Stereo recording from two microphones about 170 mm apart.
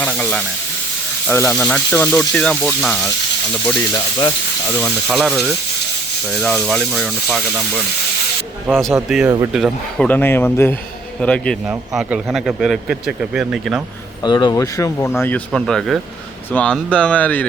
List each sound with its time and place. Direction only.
0.0 s sizzle: 10° left (ahead or behind)
1.3 s speech: 15° left (ahead or behind)
3.7 s speech: 15° left (ahead or behind)
5.0 s speech: centre (ahead or behind)
8.7 s speech: centre (ahead or behind)
9.2 s speech: 20° right (ahead or behind)
9.5 s speech: centre (ahead or behind)
10.1 s speech: 10° left (ahead or behind)
14.3 s speech: 25° left (ahead or behind)
15.2 s speech: 5° left (ahead or behind)